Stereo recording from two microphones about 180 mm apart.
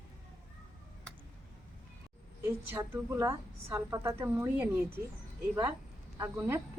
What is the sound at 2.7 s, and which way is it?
A woman's voice, 15° right (ahead or behind).